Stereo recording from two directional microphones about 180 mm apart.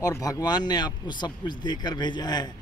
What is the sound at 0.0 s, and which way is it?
Speech, 20° left (ahead or behind).